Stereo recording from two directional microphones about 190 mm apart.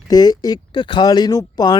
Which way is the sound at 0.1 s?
20° left (ahead or behind).